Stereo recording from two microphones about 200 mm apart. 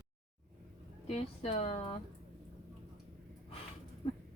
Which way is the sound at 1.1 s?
30° left (ahead or behind).